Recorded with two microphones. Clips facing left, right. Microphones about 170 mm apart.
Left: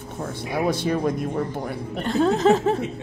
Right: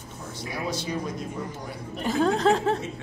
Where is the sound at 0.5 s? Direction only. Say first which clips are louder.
Left 8 dB; 55° left (ahead or behind).